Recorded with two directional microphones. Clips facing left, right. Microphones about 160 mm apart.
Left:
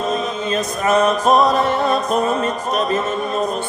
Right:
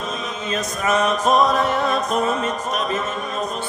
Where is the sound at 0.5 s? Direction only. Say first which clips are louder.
Left 3 dB; 35° left (ahead or behind).